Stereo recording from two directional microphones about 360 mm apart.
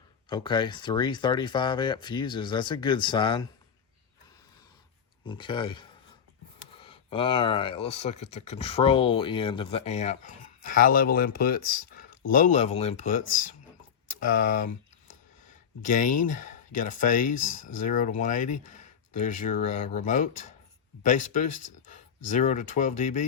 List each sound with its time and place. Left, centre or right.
0.3 s speech: centre
5.2 s speech: centre